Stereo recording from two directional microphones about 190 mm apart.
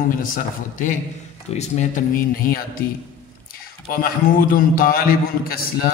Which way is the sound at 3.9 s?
50° left (ahead or behind).